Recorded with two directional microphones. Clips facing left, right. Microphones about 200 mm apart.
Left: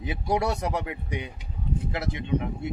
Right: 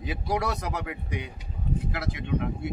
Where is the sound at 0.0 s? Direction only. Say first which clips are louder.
Left 2 dB; 25° left (ahead or behind).